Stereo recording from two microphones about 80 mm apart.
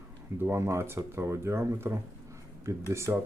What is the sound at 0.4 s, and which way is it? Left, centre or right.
Speech, right.